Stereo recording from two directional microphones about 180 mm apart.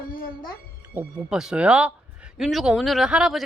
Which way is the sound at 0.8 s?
10° right (ahead or behind).